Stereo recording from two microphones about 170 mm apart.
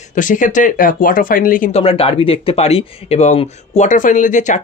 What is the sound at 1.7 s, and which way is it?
Speech, 35° left (ahead or behind).